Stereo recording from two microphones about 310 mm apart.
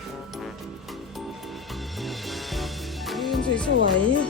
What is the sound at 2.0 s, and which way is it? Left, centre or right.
Music, centre.